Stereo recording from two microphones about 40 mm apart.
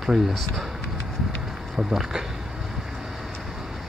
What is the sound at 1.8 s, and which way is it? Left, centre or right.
Speech, centre.